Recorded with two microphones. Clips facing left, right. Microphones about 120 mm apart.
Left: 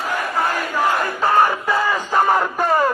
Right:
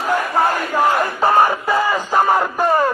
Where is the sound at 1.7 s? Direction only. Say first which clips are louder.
Right 2 dB; 5° right (ahead or behind).